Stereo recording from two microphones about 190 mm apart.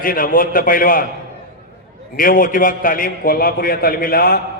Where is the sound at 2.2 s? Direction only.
50° left (ahead or behind).